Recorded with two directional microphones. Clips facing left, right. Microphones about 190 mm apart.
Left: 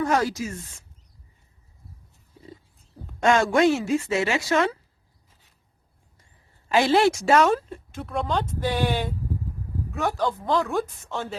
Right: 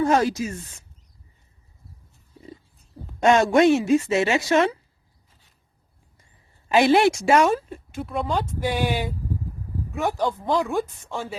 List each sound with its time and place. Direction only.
0.0 s speech: 25° right (ahead or behind)
3.2 s speech: 20° right (ahead or behind)
6.7 s a woman's voice: 15° right (ahead or behind)